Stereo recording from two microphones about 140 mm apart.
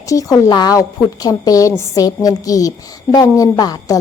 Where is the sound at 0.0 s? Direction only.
25° left (ahead or behind).